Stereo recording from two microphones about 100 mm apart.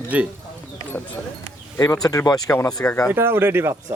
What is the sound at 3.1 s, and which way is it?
Speech, 25° right (ahead or behind).